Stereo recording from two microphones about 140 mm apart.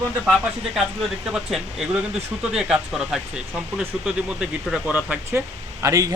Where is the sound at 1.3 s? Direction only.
5° right (ahead or behind).